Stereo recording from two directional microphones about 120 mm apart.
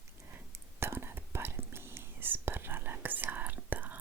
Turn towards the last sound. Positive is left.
turn(degrees=-15)  # may be behind; listen again after turning